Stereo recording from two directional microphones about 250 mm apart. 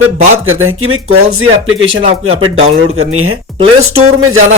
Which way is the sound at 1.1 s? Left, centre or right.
Right.